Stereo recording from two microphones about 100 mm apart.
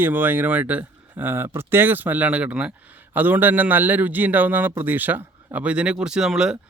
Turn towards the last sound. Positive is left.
turn(degrees=-5)  # may be behind; listen again after turning